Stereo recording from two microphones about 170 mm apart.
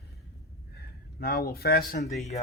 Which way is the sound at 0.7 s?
65° left (ahead or behind).